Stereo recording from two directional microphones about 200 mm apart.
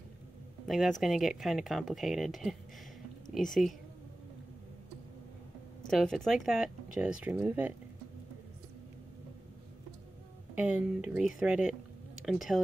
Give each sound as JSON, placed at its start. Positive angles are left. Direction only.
{"t": 0.7, "sound": "speech", "side_deg": 0}
{"t": 5.9, "sound": "speech", "side_deg": 0}
{"t": 10.5, "sound": "speech", "side_deg": -5}